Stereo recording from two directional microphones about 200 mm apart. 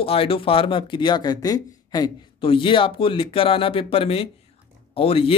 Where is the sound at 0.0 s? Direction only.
30° left (ahead or behind).